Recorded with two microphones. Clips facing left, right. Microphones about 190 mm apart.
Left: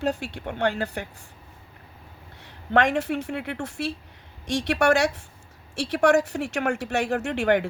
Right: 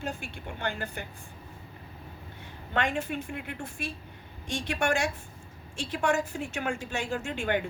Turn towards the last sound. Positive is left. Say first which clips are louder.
# left 7 dB
turn(degrees=75)  # may be behind; listen again after turning